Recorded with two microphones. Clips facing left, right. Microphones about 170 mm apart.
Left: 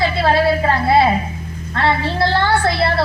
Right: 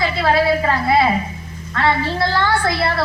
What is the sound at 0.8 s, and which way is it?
A woman's voice, 30° left (ahead or behind).